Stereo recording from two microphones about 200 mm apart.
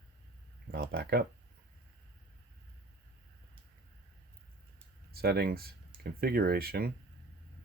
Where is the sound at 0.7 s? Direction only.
50° right (ahead or behind).